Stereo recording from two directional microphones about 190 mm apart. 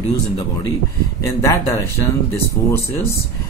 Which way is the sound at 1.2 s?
15° left (ahead or behind).